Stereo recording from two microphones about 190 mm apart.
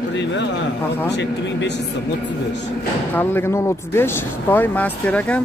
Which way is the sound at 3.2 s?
15° left (ahead or behind).